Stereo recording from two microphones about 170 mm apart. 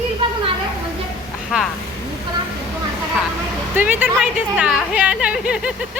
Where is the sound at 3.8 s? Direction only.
10° right (ahead or behind).